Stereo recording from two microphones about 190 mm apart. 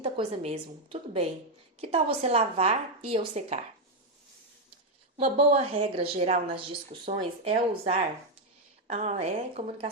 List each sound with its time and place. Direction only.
0.0 s a woman's voice: 30° right (ahead or behind)
5.2 s a woman's voice: 35° right (ahead or behind)
8.9 s a woman's voice: 35° right (ahead or behind)